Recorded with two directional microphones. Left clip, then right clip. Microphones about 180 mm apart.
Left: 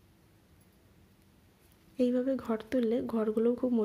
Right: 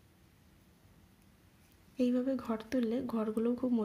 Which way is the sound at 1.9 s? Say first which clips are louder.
Left 3 dB; 15° left (ahead or behind).